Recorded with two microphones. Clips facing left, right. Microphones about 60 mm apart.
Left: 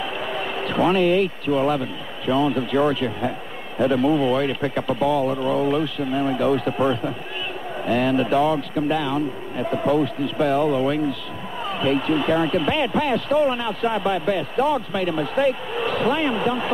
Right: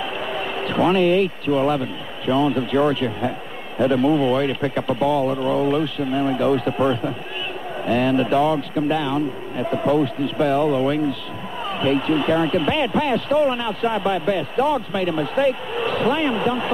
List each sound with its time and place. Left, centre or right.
0.2 s a sound: right
1.5 s speech: right
2.4 s speech: right
5.2 s speech: right
5.7 s speech: right
9.1 s speech: right
11.8 s speech: right